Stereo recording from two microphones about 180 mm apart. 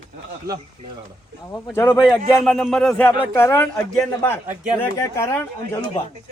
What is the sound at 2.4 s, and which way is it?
Speech, centre (ahead or behind).